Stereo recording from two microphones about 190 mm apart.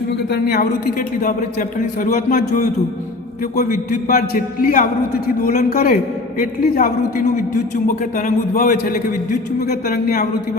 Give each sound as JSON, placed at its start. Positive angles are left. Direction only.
{"t": 0.6, "sound": "a man's voice", "side_deg": 45}